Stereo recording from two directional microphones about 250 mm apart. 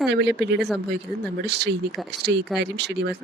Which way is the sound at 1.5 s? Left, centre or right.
Right.